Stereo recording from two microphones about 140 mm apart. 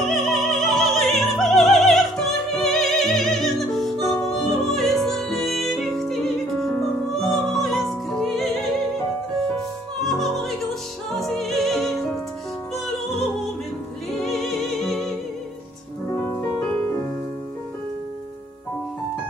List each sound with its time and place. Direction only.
0.0 s music: centre (ahead or behind)
10.0 s opera: centre (ahead or behind)
11.1 s music: centre (ahead or behind)
16.2 s music: 15° left (ahead or behind)